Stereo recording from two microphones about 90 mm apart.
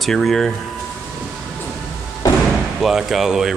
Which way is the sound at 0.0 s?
5° left (ahead or behind).